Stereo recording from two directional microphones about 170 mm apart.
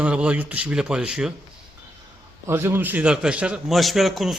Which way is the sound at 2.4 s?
15° right (ahead or behind).